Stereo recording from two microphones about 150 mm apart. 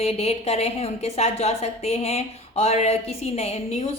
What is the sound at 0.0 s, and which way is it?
A woman's voice, 45° left (ahead or behind).